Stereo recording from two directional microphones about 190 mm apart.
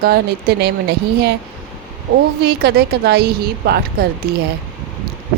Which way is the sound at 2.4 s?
55° right (ahead or behind).